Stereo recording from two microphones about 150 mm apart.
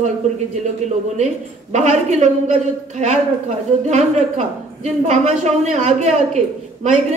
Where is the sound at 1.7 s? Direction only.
50° right (ahead or behind).